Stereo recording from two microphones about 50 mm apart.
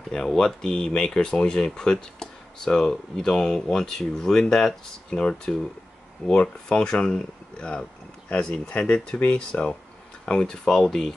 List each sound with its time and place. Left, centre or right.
0.1 s speech: centre